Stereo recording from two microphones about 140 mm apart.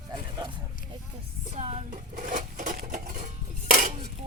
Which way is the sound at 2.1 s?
65° right (ahead or behind).